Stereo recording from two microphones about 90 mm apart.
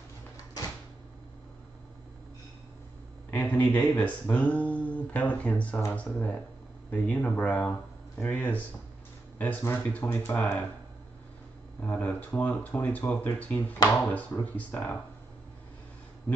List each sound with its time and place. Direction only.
3.3 s speech: 20° left (ahead or behind)
11.8 s speech: 20° left (ahead or behind)